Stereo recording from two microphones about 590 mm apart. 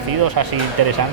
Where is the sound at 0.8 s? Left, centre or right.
Right.